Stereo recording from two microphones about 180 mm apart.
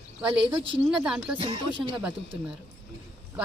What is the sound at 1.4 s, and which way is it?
Speech, 30° right (ahead or behind).